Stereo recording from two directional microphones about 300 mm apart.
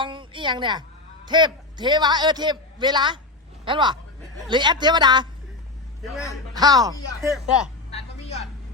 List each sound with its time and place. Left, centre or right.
0.0 s a woman's voice: centre
6.6 s a man's voice: centre
7.2 s speech: centre
7.9 s a sound: centre